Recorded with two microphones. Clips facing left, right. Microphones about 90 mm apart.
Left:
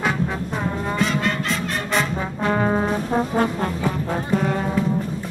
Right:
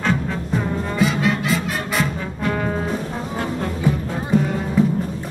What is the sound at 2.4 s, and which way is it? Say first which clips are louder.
Brass instrument: left 3 dB; 35° left (ahead or behind).